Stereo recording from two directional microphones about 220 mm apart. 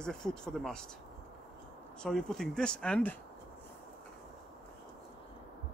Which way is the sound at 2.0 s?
5° left (ahead or behind).